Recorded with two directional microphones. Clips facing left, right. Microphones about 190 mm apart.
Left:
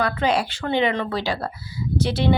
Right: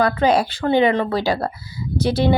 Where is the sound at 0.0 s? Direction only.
40° right (ahead or behind).